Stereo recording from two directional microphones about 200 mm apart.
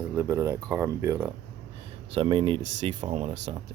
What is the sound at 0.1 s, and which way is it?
Speech, 15° right (ahead or behind).